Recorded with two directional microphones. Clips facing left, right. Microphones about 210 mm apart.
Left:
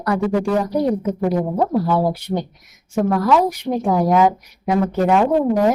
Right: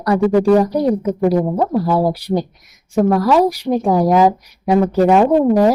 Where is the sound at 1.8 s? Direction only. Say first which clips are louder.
Right 2 dB; 35° right (ahead or behind).